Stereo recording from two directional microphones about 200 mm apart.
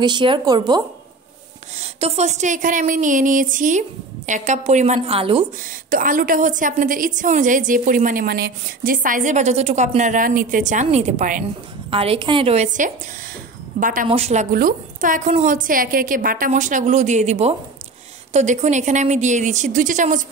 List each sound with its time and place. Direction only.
0.0 s a woman's voice: 25° right (ahead or behind)
1.8 s a woman's voice: 30° right (ahead or behind)
5.9 s a woman's voice: 45° right (ahead or behind)
11.9 s a woman's voice: 30° right (ahead or behind)
14.0 s a woman's voice: 30° right (ahead or behind)